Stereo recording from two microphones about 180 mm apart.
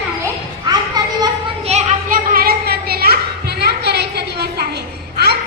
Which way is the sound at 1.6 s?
40° right (ahead or behind).